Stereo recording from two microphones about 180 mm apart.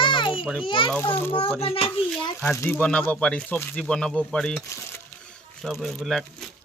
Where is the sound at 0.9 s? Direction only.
10° left (ahead or behind).